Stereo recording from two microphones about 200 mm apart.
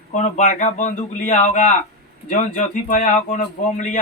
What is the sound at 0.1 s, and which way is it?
Speech, 35° left (ahead or behind).